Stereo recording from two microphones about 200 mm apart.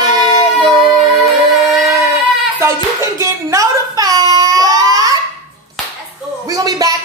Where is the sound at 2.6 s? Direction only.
15° right (ahead or behind).